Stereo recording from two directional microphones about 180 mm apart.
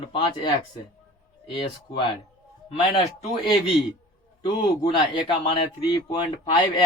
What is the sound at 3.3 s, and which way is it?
Speech, 25° left (ahead or behind).